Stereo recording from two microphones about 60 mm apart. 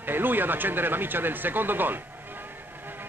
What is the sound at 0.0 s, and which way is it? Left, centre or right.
Speech, right.